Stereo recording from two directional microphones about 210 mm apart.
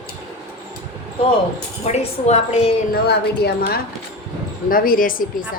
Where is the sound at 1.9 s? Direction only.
30° left (ahead or behind).